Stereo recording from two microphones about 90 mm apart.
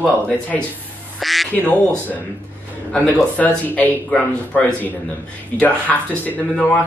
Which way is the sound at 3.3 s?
15° left (ahead or behind).